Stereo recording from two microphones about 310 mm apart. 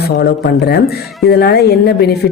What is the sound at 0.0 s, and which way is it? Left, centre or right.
Speech, left.